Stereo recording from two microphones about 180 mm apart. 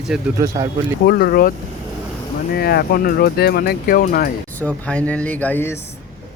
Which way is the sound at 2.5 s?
60° left (ahead or behind).